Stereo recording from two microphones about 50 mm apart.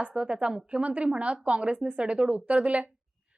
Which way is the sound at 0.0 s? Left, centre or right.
Right.